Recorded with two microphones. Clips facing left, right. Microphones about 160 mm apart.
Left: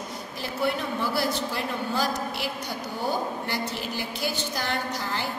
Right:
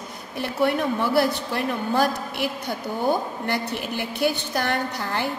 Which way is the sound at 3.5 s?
60° right (ahead or behind).